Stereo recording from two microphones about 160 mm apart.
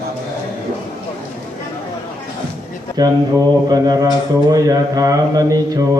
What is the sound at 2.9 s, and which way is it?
Speech, 25° right (ahead or behind).